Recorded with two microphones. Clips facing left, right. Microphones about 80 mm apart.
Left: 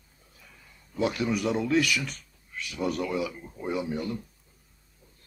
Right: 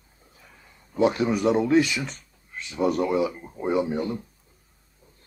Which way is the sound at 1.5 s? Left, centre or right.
Centre.